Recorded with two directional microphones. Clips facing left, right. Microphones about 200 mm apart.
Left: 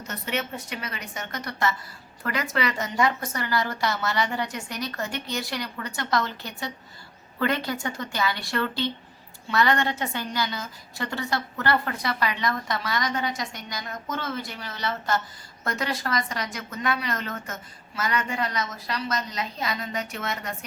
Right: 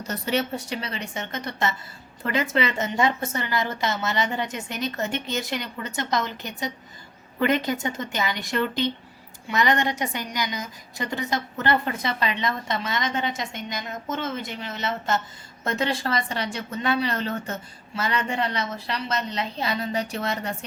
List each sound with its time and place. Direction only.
0.1 s a woman's voice: 35° right (ahead or behind)